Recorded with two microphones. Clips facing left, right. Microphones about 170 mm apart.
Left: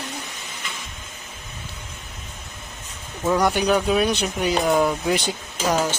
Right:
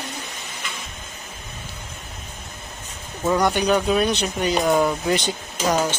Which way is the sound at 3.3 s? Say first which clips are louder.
Even; 5° left (ahead or behind).